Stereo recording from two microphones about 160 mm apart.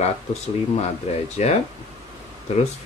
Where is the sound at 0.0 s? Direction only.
45° left (ahead or behind).